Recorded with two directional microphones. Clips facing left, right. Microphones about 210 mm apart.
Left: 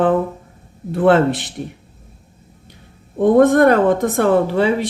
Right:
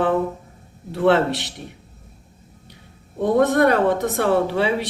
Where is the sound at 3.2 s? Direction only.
50° left (ahead or behind).